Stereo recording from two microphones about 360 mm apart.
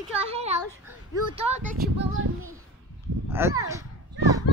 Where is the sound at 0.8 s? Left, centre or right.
Centre.